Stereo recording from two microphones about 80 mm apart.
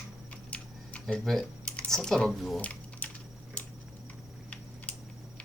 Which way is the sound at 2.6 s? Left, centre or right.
Centre.